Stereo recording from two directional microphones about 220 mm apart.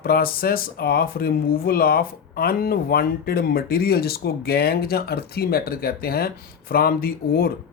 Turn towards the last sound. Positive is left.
turn(degrees=45)  # may be behind; listen again after turning